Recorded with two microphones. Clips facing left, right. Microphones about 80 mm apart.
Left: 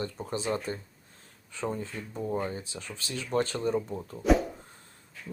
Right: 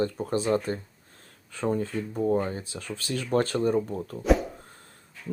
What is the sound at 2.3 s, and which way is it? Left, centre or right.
Speech, right.